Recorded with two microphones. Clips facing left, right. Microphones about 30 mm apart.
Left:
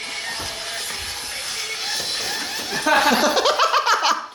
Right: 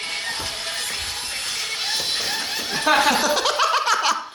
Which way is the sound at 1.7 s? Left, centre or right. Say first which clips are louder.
Right 1 dB; right.